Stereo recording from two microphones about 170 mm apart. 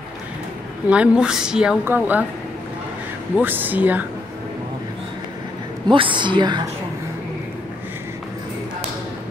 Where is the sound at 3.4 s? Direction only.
10° right (ahead or behind).